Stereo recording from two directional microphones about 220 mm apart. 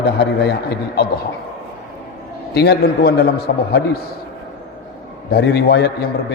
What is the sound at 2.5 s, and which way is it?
Speech, 45° left (ahead or behind).